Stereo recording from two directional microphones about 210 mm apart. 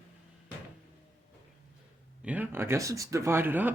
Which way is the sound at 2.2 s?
10° right (ahead or behind).